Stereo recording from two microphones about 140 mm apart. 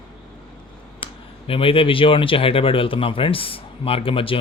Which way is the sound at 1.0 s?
40° left (ahead or behind).